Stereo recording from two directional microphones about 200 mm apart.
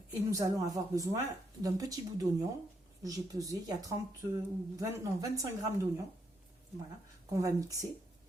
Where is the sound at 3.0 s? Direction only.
15° right (ahead or behind).